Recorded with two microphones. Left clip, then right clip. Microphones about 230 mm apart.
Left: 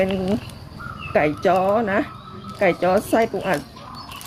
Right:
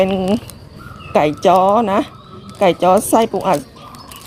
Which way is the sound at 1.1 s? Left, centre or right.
Right.